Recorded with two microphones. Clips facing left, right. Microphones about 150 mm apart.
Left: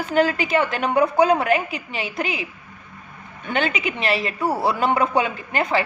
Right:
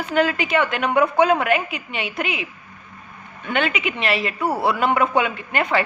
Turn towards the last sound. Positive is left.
turn(degrees=30)  # may be behind; listen again after turning